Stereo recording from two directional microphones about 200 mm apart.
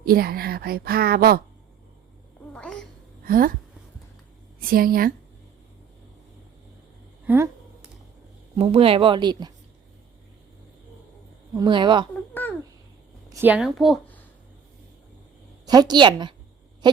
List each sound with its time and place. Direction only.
0.0 s a woman's voice: 50° right (ahead or behind)
2.5 s a sound: 5° left (ahead or behind)
3.2 s speech: 45° right (ahead or behind)
4.6 s a woman's voice: 45° right (ahead or behind)
7.3 s speech: 15° right (ahead or behind)
8.5 s speech: 30° right (ahead or behind)
11.5 s speech: 20° right (ahead or behind)
12.3 s babbling: 10° left (ahead or behind)
13.3 s speech: 10° right (ahead or behind)
15.6 s speech: 20° right (ahead or behind)
16.8 s owl: 20° right (ahead or behind)